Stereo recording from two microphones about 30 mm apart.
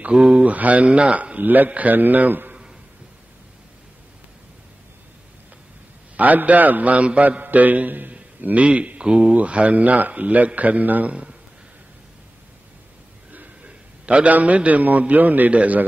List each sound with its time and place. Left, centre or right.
0.1 s speech: right
0.4 s a man's voice: right
0.8 s a man's voice: right
1.4 s a man's voice: right
1.7 s a man's voice: right
6.1 s a man's voice: right
7.2 s a man's voice: right
8.6 s speech: right
9.4 s a man's voice: right
13.7 s a sound: right
14.3 s a man's voice: right
15.5 s a man's voice: right